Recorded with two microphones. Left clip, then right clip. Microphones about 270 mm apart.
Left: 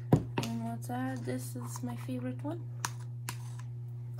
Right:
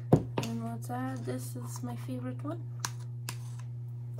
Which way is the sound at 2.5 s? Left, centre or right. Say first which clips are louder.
Even; centre.